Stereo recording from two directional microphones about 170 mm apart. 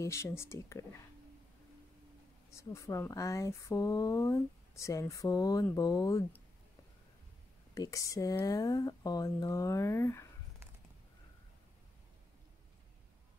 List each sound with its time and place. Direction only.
0.0 s speech: 15° left (ahead or behind)
2.5 s speech: 15° left (ahead or behind)
7.7 s speech: 20° left (ahead or behind)